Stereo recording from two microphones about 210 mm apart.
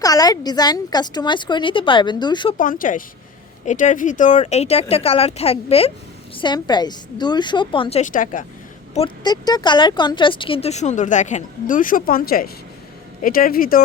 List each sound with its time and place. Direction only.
0.0 s speech: 15° left (ahead or behind)
2.6 s speech: 40° left (ahead or behind)
9.0 s speech: 20° left (ahead or behind); by 13.8 s 45° left (ahead or behind)